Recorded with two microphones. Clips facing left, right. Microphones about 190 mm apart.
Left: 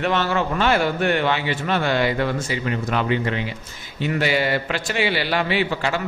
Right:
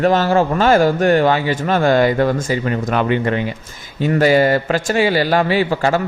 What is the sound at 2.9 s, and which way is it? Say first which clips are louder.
A man's voice: right 5 dB; 55° right (ahead or behind).